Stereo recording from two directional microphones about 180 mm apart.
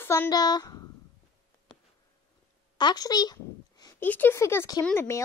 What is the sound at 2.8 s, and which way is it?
Speech, 20° left (ahead or behind).